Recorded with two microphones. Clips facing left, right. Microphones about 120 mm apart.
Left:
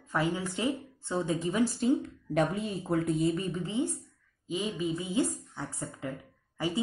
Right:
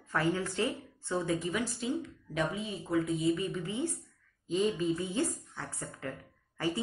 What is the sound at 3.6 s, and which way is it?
Speech, 20° left (ahead or behind).